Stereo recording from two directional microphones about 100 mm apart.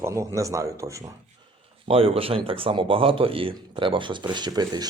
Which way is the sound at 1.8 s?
70° right (ahead or behind).